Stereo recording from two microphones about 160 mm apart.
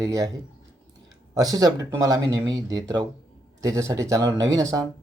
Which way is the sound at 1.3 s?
25° right (ahead or behind).